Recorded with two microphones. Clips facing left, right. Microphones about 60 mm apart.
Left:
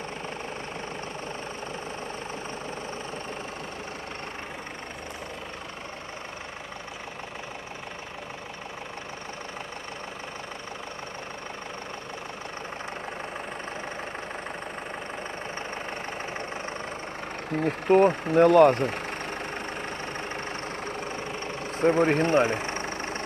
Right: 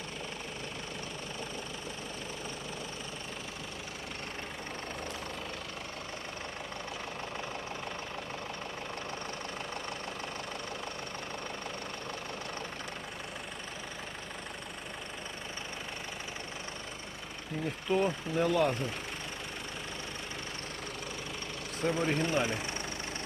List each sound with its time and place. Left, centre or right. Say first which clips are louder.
17.5 s speech: left 10 dB; left
21.8 s speech: left 9 dB; left